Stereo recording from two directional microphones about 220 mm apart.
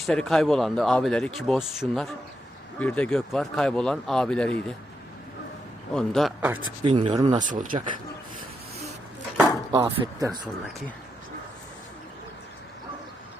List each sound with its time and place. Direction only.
0.0 s speech: centre (ahead or behind)
5.9 s speech: centre (ahead or behind)
6.8 s speech: 25° right (ahead or behind)
7.5 s speech: 35° right (ahead or behind)
9.7 s speech: 20° right (ahead or behind)